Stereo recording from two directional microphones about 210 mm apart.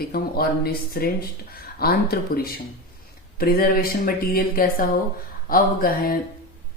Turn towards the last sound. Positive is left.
turn(degrees=45)  # may be behind; listen again after turning